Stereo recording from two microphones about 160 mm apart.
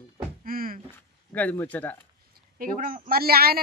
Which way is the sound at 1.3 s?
10° left (ahead or behind).